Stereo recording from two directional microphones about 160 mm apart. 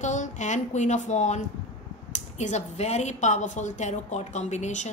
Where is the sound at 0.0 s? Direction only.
50° left (ahead or behind).